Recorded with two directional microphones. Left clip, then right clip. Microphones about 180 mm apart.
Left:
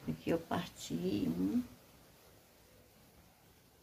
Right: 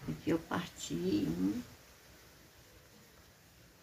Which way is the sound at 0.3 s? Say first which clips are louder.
Right 1 dB; 40° left (ahead or behind).